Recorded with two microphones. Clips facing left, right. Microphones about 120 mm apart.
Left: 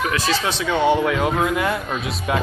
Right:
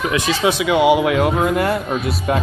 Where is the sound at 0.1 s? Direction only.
15° right (ahead or behind).